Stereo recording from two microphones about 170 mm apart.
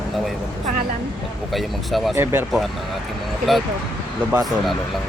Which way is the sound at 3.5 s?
Centre (ahead or behind).